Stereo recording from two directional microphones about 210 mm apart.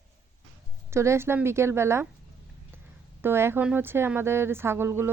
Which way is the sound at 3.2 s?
10° right (ahead or behind).